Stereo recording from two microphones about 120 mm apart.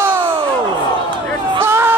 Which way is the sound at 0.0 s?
20° right (ahead or behind).